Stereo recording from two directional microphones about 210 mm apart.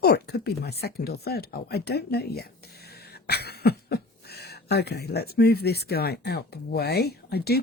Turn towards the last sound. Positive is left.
turn(degrees=50)  # may be behind; listen again after turning